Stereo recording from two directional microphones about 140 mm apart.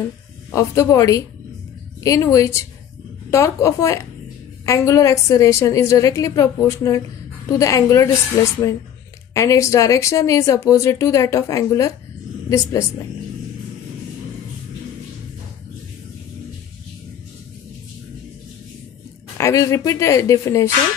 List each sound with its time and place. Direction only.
0.5 s speech: 20° left (ahead or behind)
9.3 s speech: 20° left (ahead or behind)
19.3 s speech: 20° left (ahead or behind)